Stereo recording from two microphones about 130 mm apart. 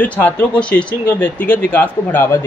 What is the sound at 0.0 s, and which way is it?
Speech, 10° left (ahead or behind).